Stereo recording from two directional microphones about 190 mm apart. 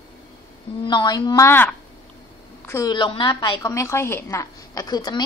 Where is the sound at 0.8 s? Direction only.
25° left (ahead or behind).